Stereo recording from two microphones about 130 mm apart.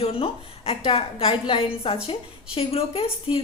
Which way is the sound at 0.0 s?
45° left (ahead or behind).